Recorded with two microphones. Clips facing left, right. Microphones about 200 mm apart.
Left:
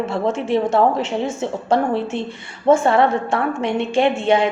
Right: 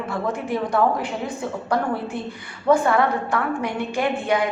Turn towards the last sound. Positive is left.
turn(degrees=25)  # may be behind; listen again after turning